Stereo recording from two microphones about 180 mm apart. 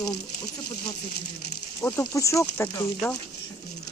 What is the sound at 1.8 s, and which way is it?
Speech, 15° left (ahead or behind).